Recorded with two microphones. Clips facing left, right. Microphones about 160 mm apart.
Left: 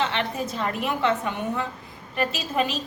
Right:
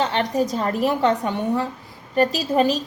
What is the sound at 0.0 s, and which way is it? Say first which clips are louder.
A woman's voice: right 5 dB; 40° right (ahead or behind).